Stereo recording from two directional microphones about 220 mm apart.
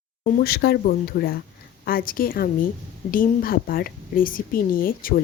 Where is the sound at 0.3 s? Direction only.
45° left (ahead or behind).